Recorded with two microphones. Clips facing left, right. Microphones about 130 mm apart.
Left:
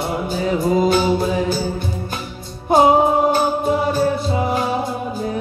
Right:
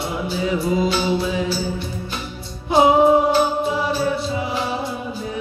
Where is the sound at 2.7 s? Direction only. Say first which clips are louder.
Even; 50° left (ahead or behind).